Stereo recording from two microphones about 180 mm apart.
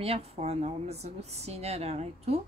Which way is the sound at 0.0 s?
35° right (ahead or behind).